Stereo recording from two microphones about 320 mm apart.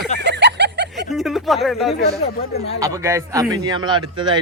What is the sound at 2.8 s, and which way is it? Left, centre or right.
Speech, centre.